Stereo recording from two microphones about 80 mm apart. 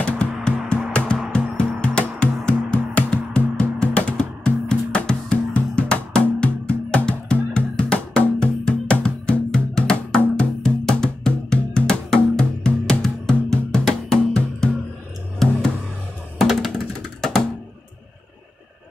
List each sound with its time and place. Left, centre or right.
0.0 s music: centre